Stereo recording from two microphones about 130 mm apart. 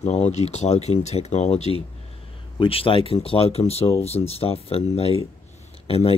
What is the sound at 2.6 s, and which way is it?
Speech, 45° left (ahead or behind).